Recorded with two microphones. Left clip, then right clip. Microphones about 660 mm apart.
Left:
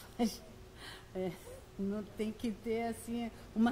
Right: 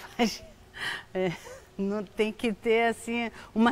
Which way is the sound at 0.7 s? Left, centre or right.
Right.